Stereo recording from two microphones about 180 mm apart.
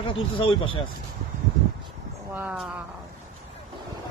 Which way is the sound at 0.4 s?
30° left (ahead or behind).